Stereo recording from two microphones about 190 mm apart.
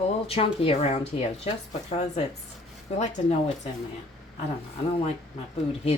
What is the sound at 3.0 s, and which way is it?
Speech, 35° left (ahead or behind).